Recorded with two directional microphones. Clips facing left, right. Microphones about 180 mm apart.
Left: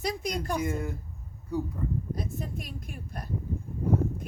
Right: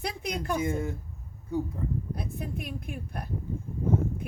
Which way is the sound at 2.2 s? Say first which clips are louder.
Even; 60° right (ahead or behind).